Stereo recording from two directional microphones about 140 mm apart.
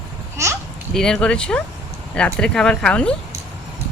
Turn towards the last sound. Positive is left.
turn(degrees=5)  # may be behind; listen again after turning